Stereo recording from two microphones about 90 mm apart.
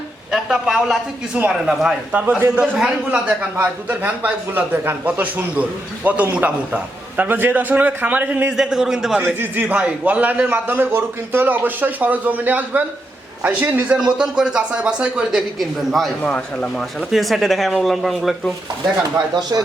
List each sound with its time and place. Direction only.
0.3 s speech: 5° right (ahead or behind)
9.2 s a man's voice: 20° right (ahead or behind)
15.5 s speech: centre (ahead or behind)
16.2 s speech: 15° left (ahead or behind)
17.1 s speech: centre (ahead or behind)
19.3 s speech: 50° right (ahead or behind)